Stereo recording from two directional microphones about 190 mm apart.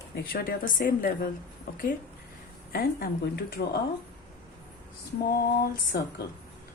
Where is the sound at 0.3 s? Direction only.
50° left (ahead or behind).